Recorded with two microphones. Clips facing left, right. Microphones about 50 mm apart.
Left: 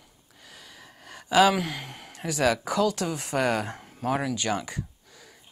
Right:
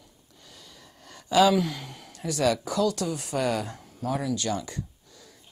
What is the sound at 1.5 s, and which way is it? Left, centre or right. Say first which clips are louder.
A man's voice: right 4 dB; left.